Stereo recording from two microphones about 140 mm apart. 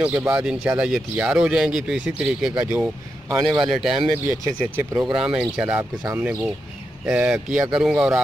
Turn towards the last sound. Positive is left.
turn(degrees=-5)  # may be behind; listen again after turning